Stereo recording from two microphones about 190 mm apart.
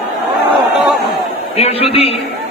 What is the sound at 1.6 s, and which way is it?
Speech, 30° left (ahead or behind).